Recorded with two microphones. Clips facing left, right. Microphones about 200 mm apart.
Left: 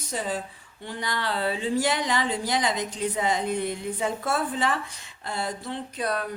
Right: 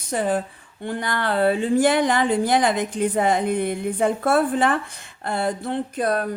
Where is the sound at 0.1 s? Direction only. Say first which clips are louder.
Right 8 dB; 55° right (ahead or behind).